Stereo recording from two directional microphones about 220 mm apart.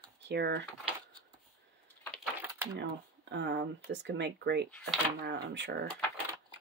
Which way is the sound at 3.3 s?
50° right (ahead or behind).